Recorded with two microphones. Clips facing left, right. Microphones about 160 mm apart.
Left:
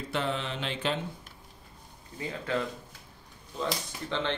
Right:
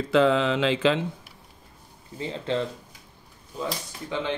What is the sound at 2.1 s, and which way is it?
Speech, 25° right (ahead or behind).